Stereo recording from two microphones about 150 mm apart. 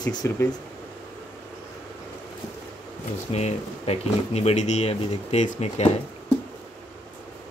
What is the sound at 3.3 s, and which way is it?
Speech, 45° left (ahead or behind).